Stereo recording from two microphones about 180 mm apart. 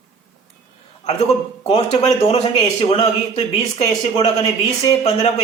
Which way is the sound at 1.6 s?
35° left (ahead or behind).